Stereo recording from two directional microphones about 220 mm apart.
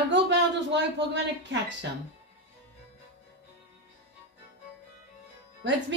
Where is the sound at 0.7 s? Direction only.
50° right (ahead or behind).